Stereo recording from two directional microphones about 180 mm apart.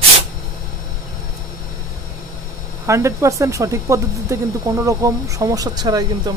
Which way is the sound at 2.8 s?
15° right (ahead or behind).